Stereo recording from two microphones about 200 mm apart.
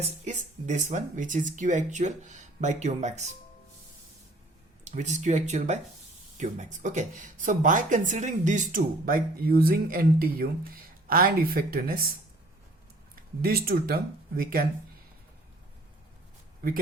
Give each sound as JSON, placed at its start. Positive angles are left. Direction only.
{"t": 0.0, "sound": "speech", "side_deg": -35}
{"t": 4.9, "sound": "speech", "side_deg": -35}
{"t": 13.4, "sound": "speech", "side_deg": -50}